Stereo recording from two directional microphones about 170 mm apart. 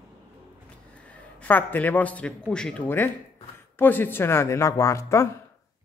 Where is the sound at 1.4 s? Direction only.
10° left (ahead or behind).